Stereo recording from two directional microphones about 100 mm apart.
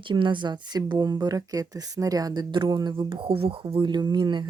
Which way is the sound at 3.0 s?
55° right (ahead or behind).